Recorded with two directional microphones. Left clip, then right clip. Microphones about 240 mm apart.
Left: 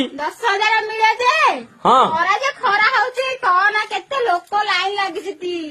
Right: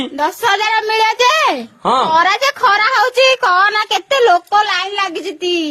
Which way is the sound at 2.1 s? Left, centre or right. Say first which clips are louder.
Right 5 dB; right.